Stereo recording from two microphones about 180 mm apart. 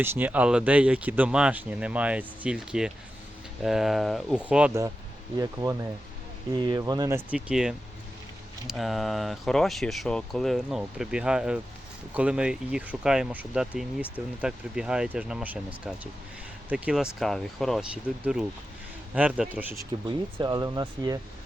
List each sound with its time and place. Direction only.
0.0 s speech: 10° right (ahead or behind)
5.4 s speech: 20° right (ahead or behind)
16.6 s speech: 5° right (ahead or behind)
20.1 s speech: 25° right (ahead or behind)